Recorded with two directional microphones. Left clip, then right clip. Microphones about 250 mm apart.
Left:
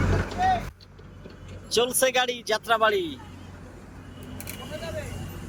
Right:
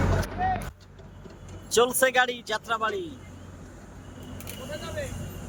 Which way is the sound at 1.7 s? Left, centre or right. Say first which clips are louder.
Right 1 dB; centre.